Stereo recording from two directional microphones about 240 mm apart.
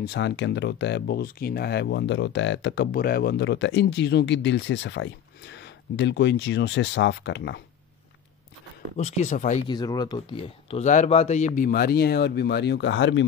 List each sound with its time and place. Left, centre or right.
0.0 s speech: left
8.9 s speech: left
9.7 s a man's voice: centre; by 13.2 s left